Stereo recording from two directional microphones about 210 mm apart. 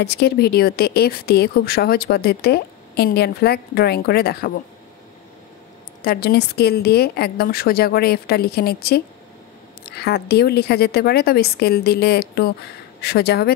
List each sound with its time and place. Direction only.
0.0 s speech: 50° left (ahead or behind)
6.0 s speech: 50° left (ahead or behind)